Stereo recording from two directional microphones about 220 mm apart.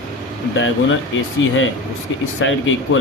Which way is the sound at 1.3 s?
60° left (ahead or behind).